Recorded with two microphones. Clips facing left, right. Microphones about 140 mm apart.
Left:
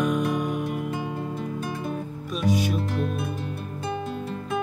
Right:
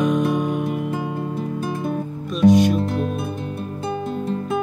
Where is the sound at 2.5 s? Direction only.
75° right (ahead or behind).